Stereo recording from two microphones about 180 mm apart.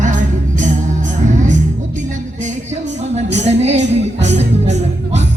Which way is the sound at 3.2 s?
40° right (ahead or behind).